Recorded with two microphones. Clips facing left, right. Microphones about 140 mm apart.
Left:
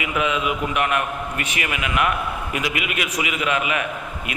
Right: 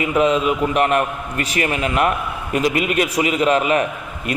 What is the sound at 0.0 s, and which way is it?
A man's voice, 35° right (ahead or behind).